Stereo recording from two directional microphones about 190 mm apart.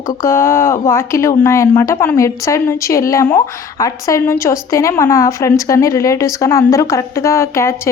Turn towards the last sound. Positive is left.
turn(degrees=15)  # may be behind; listen again after turning